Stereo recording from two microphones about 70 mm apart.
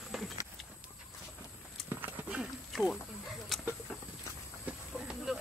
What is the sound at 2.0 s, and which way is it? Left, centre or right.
Horse, right.